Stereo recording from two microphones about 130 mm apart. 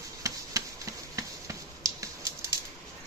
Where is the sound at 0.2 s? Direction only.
25° right (ahead or behind).